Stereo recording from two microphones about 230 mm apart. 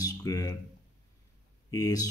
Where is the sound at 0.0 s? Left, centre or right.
Centre.